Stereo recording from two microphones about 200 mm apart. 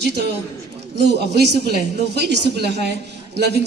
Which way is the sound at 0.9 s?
55° right (ahead or behind).